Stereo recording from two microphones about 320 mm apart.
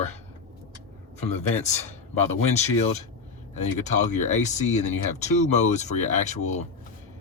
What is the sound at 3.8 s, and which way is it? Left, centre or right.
Speech, left.